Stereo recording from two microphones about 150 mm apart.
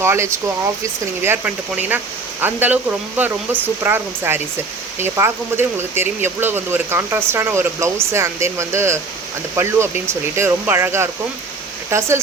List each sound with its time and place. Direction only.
0.0 s speech: 15° right (ahead or behind)